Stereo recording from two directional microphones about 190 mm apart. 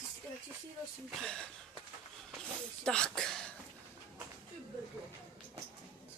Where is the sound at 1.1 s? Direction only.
5° left (ahead or behind).